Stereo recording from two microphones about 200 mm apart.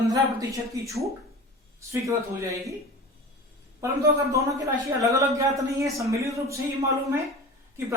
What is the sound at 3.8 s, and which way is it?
Speech, 15° right (ahead or behind).